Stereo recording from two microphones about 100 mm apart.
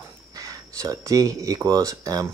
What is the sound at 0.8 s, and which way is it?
Speech, 35° right (ahead or behind).